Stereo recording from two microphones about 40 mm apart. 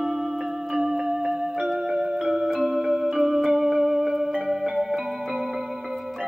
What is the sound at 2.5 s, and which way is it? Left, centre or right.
Music, centre.